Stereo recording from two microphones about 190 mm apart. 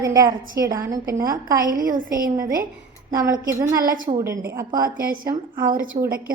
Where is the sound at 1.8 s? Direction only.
45° right (ahead or behind).